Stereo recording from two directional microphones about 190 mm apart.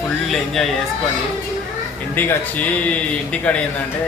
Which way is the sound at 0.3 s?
Centre (ahead or behind).